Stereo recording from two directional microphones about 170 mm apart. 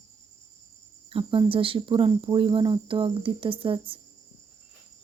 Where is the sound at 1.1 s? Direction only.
35° right (ahead or behind).